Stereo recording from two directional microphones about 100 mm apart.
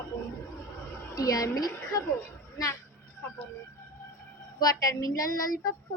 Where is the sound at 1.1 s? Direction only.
35° left (ahead or behind).